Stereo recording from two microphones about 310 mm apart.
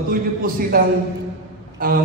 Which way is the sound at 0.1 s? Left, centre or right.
Right.